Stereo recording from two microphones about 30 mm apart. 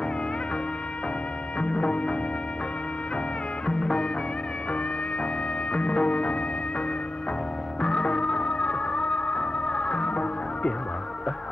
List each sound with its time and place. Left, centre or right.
1.6 s music: left
3.6 s music: left
5.7 s music: left
7.8 s music: left